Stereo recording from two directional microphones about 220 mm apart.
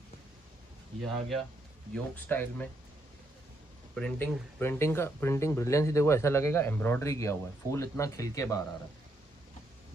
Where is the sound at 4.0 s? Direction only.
5° left (ahead or behind).